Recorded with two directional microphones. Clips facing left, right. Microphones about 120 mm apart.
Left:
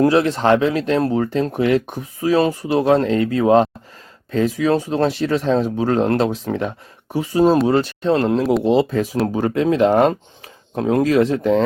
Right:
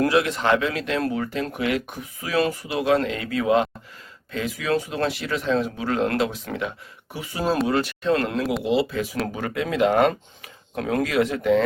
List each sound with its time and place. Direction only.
0.0 s speech: 30° left (ahead or behind)